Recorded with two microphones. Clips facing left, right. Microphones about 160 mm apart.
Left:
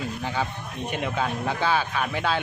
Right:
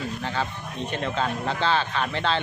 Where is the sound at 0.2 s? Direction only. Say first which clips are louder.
Even; 15° left (ahead or behind).